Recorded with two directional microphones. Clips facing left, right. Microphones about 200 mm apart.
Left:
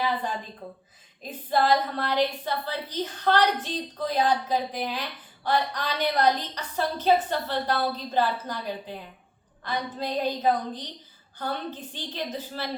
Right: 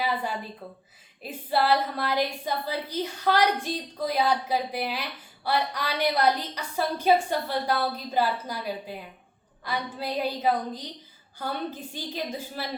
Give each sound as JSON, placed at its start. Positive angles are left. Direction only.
{"t": 0.0, "sound": "a woman's voice", "side_deg": -10}
{"t": 0.6, "sound": "speech", "side_deg": 15}
{"t": 1.2, "sound": "a woman's voice", "side_deg": -10}